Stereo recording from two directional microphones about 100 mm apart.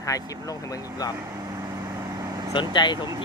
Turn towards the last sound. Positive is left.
turn(degrees=50)  # may be behind; listen again after turning